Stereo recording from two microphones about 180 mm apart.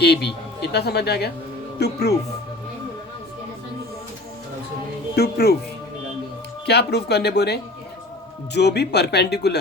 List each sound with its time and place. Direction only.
0.0 s speech: 65° left (ahead or behind)
5.1 s speech: 60° left (ahead or behind)
6.7 s speech: 65° left (ahead or behind)